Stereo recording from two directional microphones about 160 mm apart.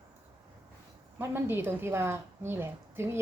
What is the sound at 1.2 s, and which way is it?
A woman's voice, 15° right (ahead or behind).